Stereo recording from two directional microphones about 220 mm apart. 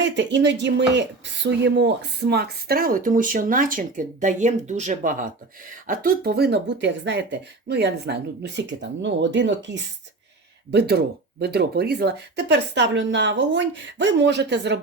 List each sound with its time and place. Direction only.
0.0 s speech: 55° right (ahead or behind)